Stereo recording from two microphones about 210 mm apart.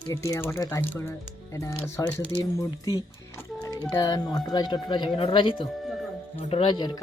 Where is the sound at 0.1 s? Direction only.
15° left (ahead or behind).